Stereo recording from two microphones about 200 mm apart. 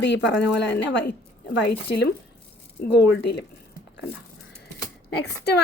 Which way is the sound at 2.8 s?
55° left (ahead or behind).